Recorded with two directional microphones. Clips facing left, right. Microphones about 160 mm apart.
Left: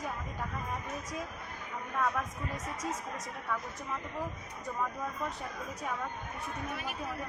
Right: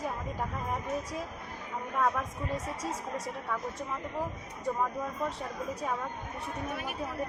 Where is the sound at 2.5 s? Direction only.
30° right (ahead or behind).